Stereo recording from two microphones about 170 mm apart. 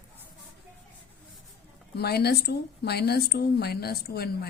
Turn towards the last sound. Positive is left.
turn(degrees=65)  # may be behind; listen again after turning